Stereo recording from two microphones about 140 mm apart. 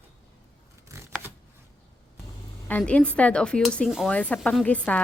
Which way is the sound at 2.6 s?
10° left (ahead or behind).